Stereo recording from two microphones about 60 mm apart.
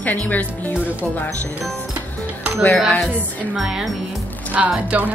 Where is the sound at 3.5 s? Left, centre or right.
Centre.